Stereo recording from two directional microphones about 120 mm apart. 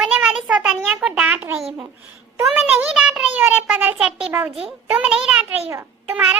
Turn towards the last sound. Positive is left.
turn(degrees=-10)  # may be behind; listen again after turning